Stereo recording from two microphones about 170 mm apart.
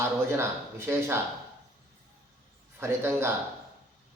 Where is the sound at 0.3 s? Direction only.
15° right (ahead or behind).